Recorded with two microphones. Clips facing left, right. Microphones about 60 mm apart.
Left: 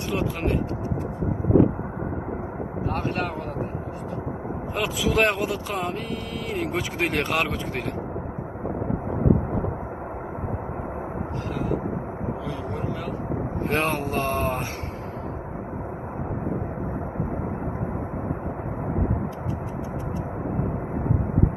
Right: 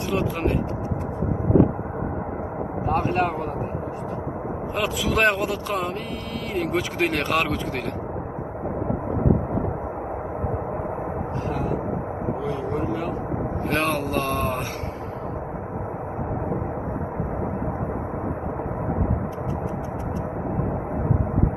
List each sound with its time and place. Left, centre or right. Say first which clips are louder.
4.7 s a man's voice: even; centre
13.7 s vehicle: right 1 dB; left